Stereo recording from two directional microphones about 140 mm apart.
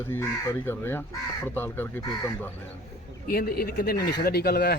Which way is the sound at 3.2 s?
90° left.